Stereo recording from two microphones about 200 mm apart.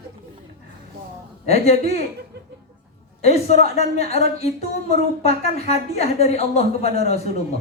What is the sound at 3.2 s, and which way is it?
A woman's voice, 30° left (ahead or behind).